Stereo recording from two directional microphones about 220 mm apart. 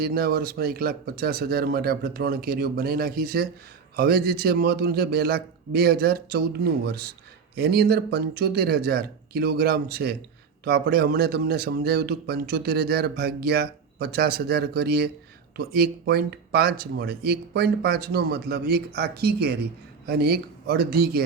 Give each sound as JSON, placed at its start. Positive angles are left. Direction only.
{"t": 0.0, "sound": "speech", "side_deg": -45}